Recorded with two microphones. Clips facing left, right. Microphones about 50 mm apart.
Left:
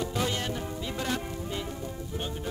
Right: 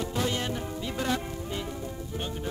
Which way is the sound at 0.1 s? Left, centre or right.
Centre.